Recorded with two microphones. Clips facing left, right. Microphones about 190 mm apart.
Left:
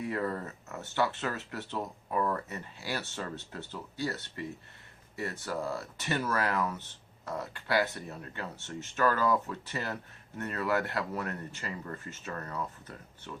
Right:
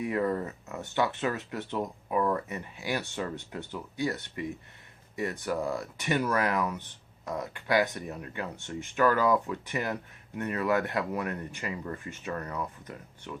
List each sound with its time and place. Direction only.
0.0 s speech: 15° right (ahead or behind)